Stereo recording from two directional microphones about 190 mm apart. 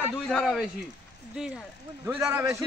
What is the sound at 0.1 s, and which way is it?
Speech, 5° left (ahead or behind).